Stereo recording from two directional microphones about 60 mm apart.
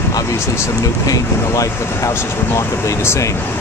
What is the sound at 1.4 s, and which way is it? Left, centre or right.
Speech, left.